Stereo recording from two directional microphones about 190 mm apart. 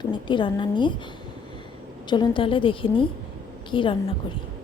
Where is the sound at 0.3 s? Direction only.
25° left (ahead or behind).